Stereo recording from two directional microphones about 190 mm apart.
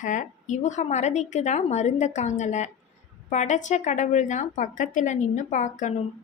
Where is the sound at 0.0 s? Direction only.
40° left (ahead or behind).